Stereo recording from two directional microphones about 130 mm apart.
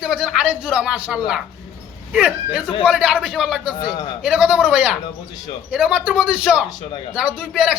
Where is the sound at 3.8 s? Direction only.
35° left (ahead or behind).